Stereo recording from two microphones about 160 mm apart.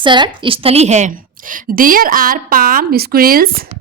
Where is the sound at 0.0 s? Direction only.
30° right (ahead or behind); by 3.7 s 65° right (ahead or behind).